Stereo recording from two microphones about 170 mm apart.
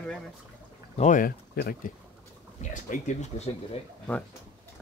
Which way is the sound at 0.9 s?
45° left (ahead or behind).